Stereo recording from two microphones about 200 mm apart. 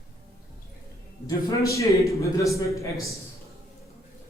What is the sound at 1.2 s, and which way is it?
A man's voice, 15° left (ahead or behind).